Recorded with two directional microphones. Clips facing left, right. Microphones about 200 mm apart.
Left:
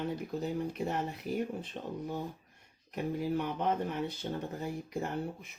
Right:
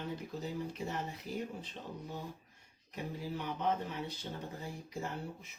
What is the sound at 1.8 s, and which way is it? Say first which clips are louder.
Speech: left 7 dB; 55° left (ahead or behind).